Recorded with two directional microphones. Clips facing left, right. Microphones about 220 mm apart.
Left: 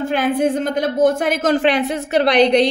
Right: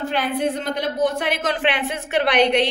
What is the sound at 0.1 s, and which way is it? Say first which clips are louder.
Speech: left 6 dB; 45° left (ahead or behind).